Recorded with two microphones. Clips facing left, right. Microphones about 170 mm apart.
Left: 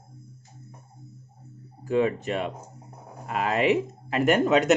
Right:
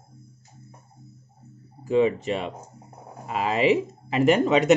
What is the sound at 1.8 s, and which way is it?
Speech, centre (ahead or behind).